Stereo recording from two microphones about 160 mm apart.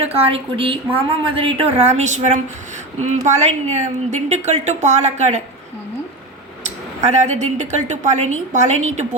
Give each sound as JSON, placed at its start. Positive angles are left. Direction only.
{"t": 0.0, "sound": "a woman's voice", "side_deg": -40}
{"t": 7.0, "sound": "a woman's voice", "side_deg": -45}